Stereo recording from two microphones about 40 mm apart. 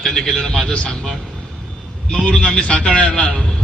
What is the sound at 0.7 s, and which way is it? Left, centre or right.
Speech, left.